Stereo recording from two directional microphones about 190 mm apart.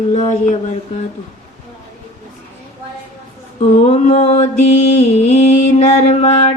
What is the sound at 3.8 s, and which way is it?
Mantra, 35° left (ahead or behind).